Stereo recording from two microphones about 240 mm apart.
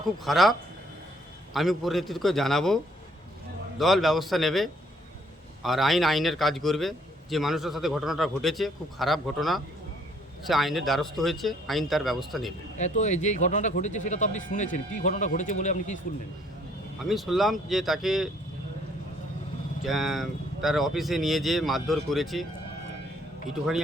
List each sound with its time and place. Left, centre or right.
0.3 s a man's voice: centre
1.5 s a man's voice: centre
3.8 s a man's voice: centre
12.8 s speech: left
17.0 s a man's voice: centre
19.8 s a man's voice: centre